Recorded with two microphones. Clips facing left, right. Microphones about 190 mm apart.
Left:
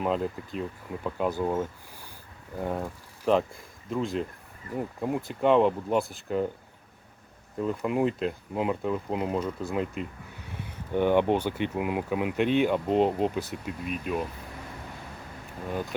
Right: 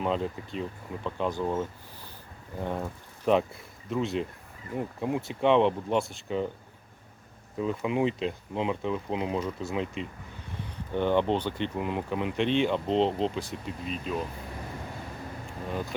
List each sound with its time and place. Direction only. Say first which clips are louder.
0.0 s speech: left 1 dB; 5° left (ahead or behind)
7.6 s speech: left 1 dB; centre (ahead or behind)